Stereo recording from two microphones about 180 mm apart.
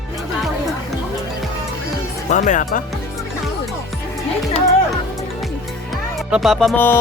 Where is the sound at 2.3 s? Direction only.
45° left (ahead or behind).